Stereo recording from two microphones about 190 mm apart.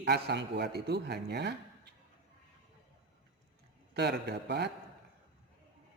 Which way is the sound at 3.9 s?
60° right (ahead or behind).